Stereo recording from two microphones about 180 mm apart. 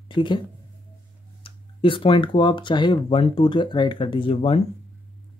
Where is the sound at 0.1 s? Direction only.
25° left (ahead or behind).